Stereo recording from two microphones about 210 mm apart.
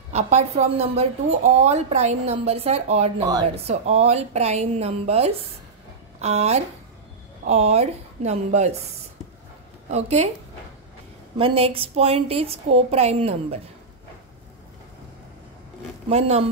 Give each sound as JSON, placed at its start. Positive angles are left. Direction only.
{"t": 0.1, "sound": "speech", "side_deg": -30}
{"t": 3.3, "sound": "a woman's voice", "side_deg": -20}
{"t": 3.6, "sound": "speech", "side_deg": -30}
{"t": 9.8, "sound": "speech", "side_deg": -30}
{"t": 11.3, "sound": "a woman's voice", "side_deg": -25}
{"t": 16.1, "sound": "a woman's voice", "side_deg": -30}